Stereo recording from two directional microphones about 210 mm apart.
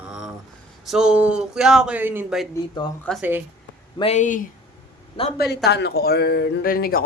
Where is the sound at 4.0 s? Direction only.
35° left (ahead or behind).